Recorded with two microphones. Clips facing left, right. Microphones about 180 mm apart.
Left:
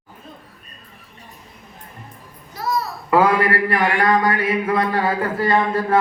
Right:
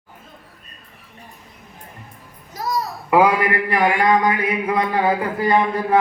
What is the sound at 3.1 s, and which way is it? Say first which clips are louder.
A man's voice: even; 15° right (ahead or behind).